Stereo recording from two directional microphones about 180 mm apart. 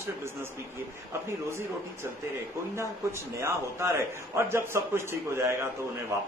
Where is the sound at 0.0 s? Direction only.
15° right (ahead or behind).